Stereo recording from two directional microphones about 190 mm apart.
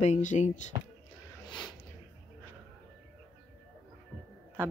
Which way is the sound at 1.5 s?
25° left (ahead or behind).